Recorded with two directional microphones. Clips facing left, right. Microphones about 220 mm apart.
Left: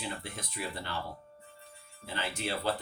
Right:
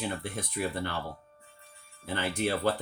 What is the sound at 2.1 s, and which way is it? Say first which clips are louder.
Speech: right 6 dB; 55° right (ahead or behind).